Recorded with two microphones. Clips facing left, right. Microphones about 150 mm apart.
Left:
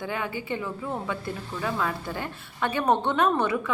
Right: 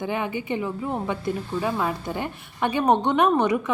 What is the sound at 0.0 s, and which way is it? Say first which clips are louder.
A woman's voice: right 4 dB; 20° right (ahead or behind).